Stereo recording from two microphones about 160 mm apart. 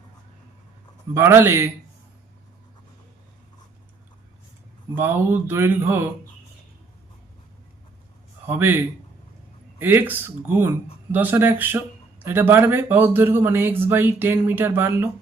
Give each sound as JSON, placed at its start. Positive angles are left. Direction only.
{"t": 1.1, "sound": "speech", "side_deg": -15}
{"t": 4.9, "sound": "speech", "side_deg": -15}
{"t": 8.4, "sound": "speech", "side_deg": -15}